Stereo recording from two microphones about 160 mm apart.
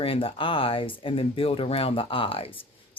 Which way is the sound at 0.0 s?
35° left (ahead or behind).